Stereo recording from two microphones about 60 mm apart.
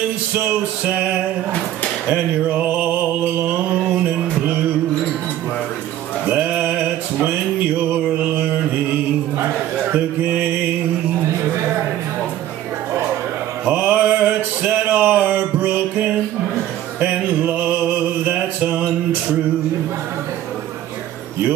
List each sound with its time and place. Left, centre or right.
0.3 s music: right
2.0 s a sound: right
6.2 s music: right
7.9 s mantra: right
13.7 s a sound: right
17.0 s music: right